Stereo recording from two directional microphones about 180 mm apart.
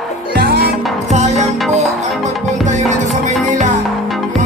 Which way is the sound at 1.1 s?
40° right (ahead or behind).